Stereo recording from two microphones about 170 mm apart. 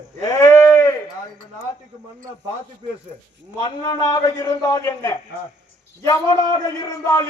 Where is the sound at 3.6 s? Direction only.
20° left (ahead or behind).